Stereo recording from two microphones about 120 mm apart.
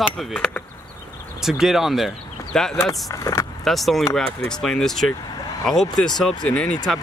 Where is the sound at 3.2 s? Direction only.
25° left (ahead or behind).